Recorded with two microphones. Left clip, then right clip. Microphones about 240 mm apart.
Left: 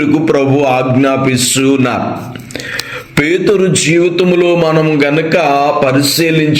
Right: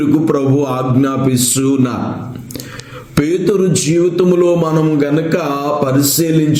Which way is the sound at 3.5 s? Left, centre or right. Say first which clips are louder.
Left 4 dB; centre.